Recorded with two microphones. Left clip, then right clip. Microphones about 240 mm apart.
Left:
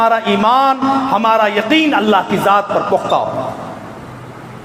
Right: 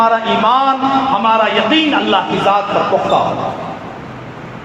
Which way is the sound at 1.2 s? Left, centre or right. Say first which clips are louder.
Right 1 dB; left.